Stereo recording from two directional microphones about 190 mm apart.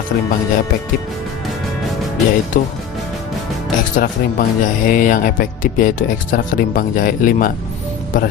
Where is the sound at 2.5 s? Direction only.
45° left (ahead or behind).